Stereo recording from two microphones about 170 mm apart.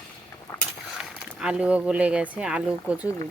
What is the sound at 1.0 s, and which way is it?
Speech, 5° right (ahead or behind).